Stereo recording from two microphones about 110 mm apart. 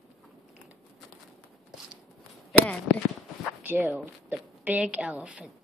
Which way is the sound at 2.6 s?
5° left (ahead or behind).